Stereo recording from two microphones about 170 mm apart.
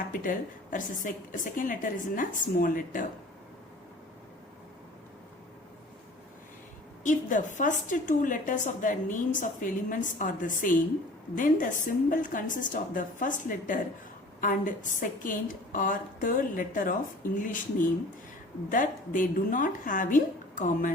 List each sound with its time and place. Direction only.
0.2 s a woman's voice: 50° left (ahead or behind)
7.0 s a woman's voice: 50° left (ahead or behind)